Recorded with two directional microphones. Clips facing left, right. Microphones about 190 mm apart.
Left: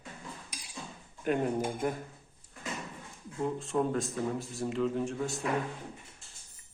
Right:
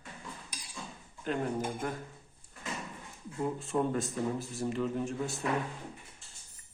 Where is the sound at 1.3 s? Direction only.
15° left (ahead or behind).